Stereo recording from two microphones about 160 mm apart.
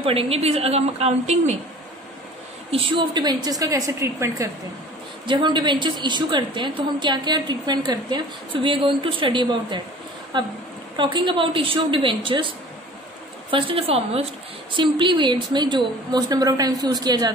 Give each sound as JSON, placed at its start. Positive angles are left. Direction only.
{"t": 0.0, "sound": "a woman's voice", "side_deg": -35}
{"t": 2.7, "sound": "a woman's voice", "side_deg": -35}
{"t": 5.2, "sound": "a woman's voice", "side_deg": -30}